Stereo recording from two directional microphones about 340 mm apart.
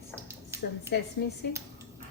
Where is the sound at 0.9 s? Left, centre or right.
Left.